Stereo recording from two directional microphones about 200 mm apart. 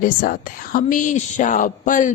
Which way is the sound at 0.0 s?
45° left (ahead or behind).